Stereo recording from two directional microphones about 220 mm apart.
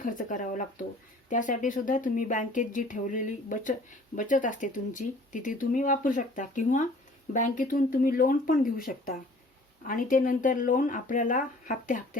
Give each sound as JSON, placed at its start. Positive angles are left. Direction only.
{"t": 0.0, "sound": "speech", "side_deg": 35}